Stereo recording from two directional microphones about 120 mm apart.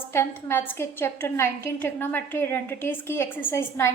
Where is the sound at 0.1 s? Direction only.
20° left (ahead or behind).